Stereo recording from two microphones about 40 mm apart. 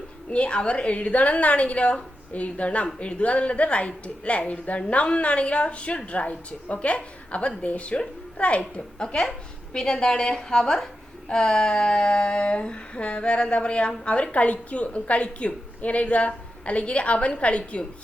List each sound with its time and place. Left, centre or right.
0.3 s a woman's voice: left
9.0 s a woman's voice: centre
11.3 s a sound: centre